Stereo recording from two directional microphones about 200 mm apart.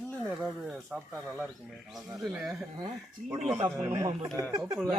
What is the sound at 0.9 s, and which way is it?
Speech, 5° right (ahead or behind).